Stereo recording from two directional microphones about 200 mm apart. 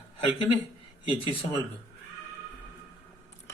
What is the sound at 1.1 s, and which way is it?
Speech, 25° left (ahead or behind).